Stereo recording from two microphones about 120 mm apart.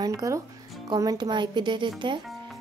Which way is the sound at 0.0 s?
30° right (ahead or behind).